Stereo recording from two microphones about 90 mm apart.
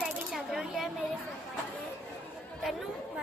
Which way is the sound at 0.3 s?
5° right (ahead or behind).